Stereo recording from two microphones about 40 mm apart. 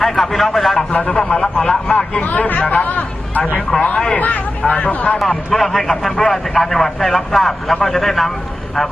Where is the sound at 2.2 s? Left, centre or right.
Left.